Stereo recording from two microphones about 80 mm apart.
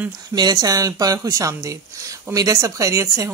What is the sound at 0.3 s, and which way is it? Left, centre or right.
Speech, right.